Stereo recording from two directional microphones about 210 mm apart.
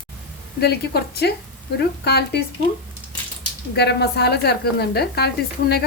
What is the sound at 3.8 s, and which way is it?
A woman's voice, 50° left (ahead or behind).